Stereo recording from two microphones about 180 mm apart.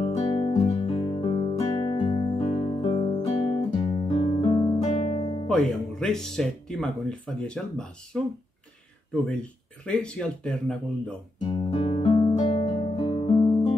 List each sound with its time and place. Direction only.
0.0 s guitar: 35° left (ahead or behind)
4.8 s music: 35° left (ahead or behind)
5.5 s speech: 5° left (ahead or behind)
11.4 s guitar: 25° left (ahead or behind)
11.7 s music: 35° left (ahead or behind)